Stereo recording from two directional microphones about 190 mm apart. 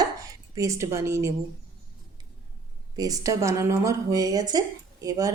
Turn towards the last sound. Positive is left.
turn(degrees=-15)  # may be behind; listen again after turning